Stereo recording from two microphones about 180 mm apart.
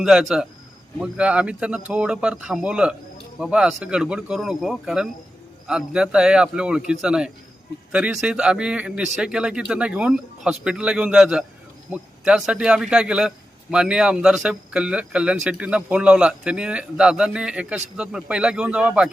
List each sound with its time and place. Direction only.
0.0 s a man's voice: 5° right (ahead or behind)